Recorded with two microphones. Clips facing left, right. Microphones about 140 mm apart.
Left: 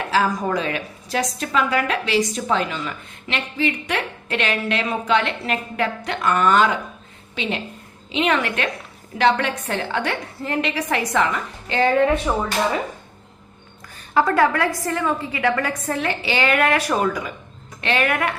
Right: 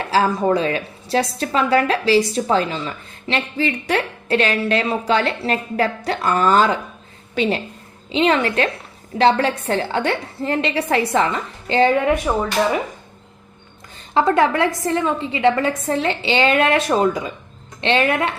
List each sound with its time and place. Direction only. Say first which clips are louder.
0.1 s a woman's voice: right 4 dB; 30° right (ahead or behind)
8.1 s a woman's voice: right 4 dB; 30° right (ahead or behind)
12.3 s speech: right 2 dB; 10° right (ahead or behind)
14.1 s a woman's voice: right 2 dB; 25° right (ahead or behind)